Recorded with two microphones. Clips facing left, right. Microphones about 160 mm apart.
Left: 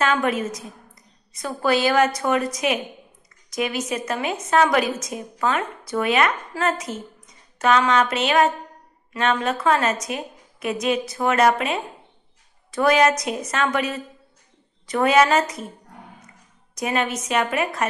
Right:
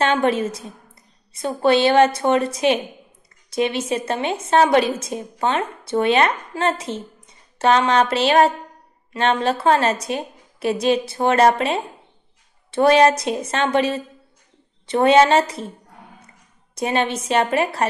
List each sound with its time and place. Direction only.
0.0 s a woman's voice: 30° right (ahead or behind)
16.7 s a woman's voice: 30° right (ahead or behind)